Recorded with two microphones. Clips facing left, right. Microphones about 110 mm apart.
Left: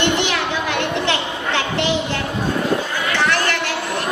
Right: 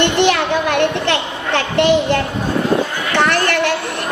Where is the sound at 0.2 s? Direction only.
55° right (ahead or behind).